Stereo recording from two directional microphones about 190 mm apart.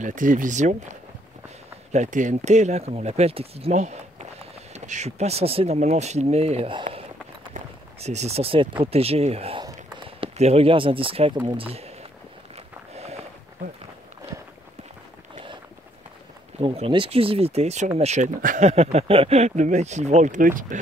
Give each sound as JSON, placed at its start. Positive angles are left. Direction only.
{"t": 0.0, "sound": "speech", "side_deg": -45}
{"t": 8.0, "sound": "speech", "side_deg": -35}
{"t": 12.9, "sound": "walk", "side_deg": -35}
{"t": 16.5, "sound": "speech", "side_deg": -30}